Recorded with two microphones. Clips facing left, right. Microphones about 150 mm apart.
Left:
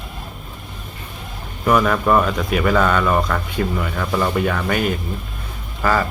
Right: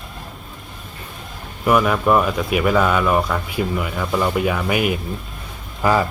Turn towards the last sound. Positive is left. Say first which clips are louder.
# right 1 dB
turn(degrees=-15)  # may be behind; listen again after turning